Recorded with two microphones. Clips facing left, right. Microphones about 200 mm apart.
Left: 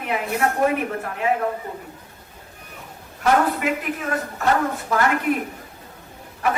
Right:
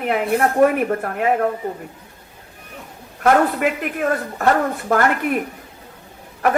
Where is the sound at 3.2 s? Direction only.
60° right (ahead or behind).